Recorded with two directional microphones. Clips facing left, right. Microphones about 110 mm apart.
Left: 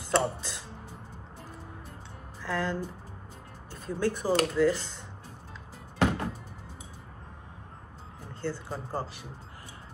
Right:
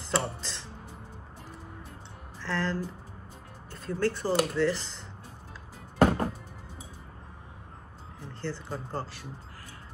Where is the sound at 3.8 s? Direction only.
15° left (ahead or behind).